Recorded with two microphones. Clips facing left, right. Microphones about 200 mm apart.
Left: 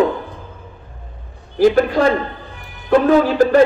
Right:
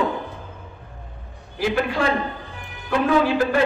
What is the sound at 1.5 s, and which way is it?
A man's voice, 40° left (ahead or behind).